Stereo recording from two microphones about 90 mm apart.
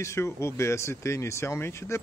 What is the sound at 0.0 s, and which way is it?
A man's voice, 30° left (ahead or behind).